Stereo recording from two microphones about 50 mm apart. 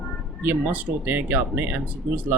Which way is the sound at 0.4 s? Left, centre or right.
Right.